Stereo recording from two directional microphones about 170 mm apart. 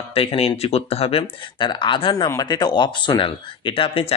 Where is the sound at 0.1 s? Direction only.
35° left (ahead or behind).